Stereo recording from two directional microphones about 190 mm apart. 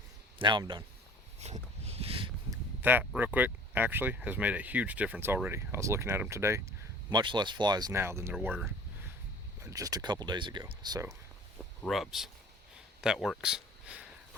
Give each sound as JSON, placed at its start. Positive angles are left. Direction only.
{"t": 0.3, "sound": "speech", "side_deg": -25}
{"t": 1.4, "sound": "a sound", "side_deg": -35}
{"t": 2.5, "sound": "a sound", "side_deg": -10}
{"t": 3.2, "sound": "speech", "side_deg": -10}
{"t": 9.6, "sound": "speech", "side_deg": -15}
{"t": 11.5, "sound": "speech", "side_deg": 0}